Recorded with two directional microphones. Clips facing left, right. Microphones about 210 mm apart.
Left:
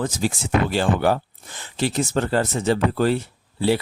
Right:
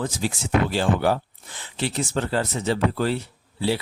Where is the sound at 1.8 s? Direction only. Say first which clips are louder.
Left 4 dB; 45° left (ahead or behind).